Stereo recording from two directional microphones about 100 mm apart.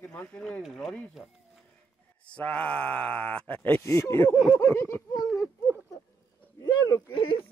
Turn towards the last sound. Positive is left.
turn(degrees=60)  # may be behind; listen again after turning